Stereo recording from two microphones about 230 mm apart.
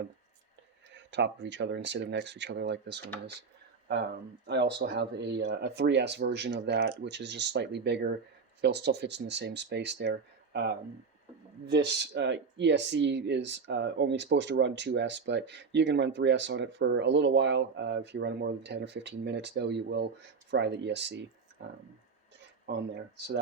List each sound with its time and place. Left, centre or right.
0.9 s speech: right
4.4 s speech: right
22.6 s speech: right